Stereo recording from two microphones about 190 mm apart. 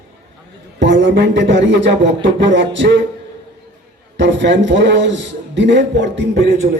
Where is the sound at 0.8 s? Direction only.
70° right (ahead or behind).